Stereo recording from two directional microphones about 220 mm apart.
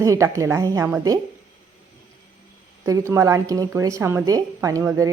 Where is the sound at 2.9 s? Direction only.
15° right (ahead or behind).